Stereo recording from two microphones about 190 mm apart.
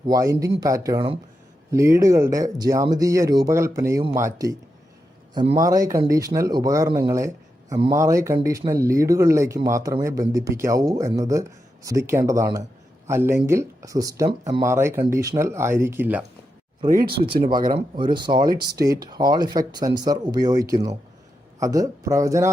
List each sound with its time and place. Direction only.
0.1 s speech: 15° right (ahead or behind)
16.9 s speech: 50° right (ahead or behind)
17.6 s speech: 45° right (ahead or behind)
17.9 s speech: 25° right (ahead or behind)